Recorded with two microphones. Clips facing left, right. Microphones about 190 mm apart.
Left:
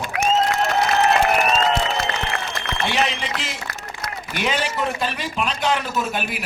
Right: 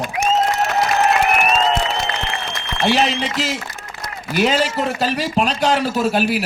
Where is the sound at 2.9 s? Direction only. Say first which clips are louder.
Right 5 dB; 35° right (ahead or behind).